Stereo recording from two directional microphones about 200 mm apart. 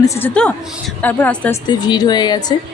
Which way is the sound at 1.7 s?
20° left (ahead or behind).